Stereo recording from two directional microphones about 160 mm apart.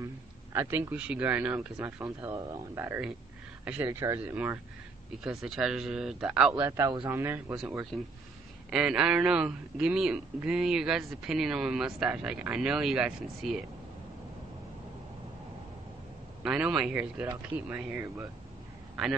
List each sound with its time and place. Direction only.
0.0 s speech: 15° right (ahead or behind)
2.0 s speech: 20° right (ahead or behind)
5.2 s a man's voice: centre (ahead or behind)
6.6 s speech: 20° right (ahead or behind)
8.6 s a man's voice: 5° right (ahead or behind)
16.4 s speech: 5° right (ahead or behind)